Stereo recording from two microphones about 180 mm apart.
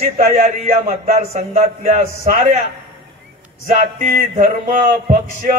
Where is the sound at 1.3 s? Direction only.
40° right (ahead or behind).